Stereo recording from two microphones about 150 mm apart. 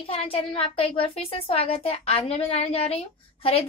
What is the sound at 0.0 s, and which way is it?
A child's voice, 40° left (ahead or behind).